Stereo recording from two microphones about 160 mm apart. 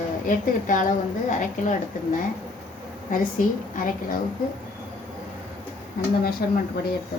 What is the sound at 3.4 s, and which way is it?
Speech, 55° left (ahead or behind).